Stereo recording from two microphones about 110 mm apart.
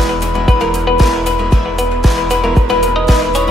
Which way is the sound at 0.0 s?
Centre (ahead or behind).